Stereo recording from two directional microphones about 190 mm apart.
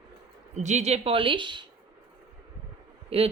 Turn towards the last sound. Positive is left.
turn(degrees=-30)  # may be behind; listen again after turning